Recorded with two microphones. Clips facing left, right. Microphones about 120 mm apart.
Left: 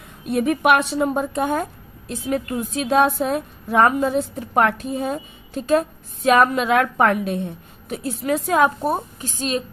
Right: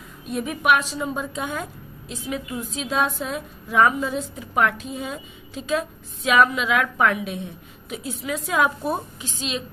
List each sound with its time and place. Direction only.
0.3 s a woman's voice: 60° left (ahead or behind)